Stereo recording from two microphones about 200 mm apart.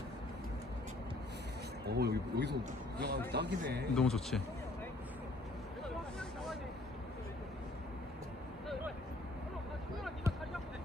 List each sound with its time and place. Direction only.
1.9 s speech: 55° right (ahead or behind)
3.9 s speech: 5° left (ahead or behind)